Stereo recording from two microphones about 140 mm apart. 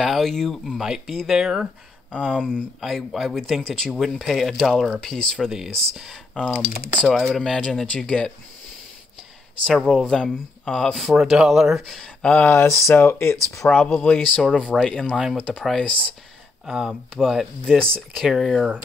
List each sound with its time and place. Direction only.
0.0 s speech: centre (ahead or behind)
6.7 s speech: 90° left
7.0 s speech: 10° left (ahead or behind)
9.7 s speech: centre (ahead or behind)
15.0 s speech: 10° right (ahead or behind)
15.5 s speech: 5° left (ahead or behind)